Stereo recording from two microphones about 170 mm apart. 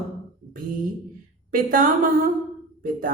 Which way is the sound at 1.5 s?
55° right (ahead or behind).